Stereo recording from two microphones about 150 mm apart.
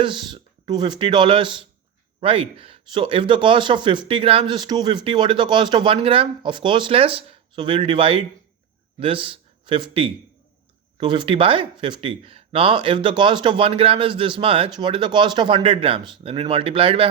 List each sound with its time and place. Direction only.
0.0 s speech: 30° right (ahead or behind)